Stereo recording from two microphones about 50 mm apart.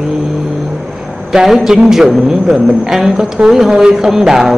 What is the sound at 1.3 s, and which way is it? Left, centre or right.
Music, centre.